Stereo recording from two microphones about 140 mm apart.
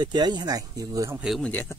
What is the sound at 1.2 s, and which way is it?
Speech, centre (ahead or behind).